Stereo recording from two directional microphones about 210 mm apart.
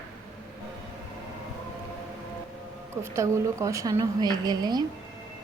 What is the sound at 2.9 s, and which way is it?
A woman's voice, 10° right (ahead or behind).